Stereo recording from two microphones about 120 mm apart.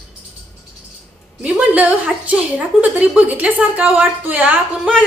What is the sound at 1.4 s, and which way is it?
A woman's voice, 10° right (ahead or behind).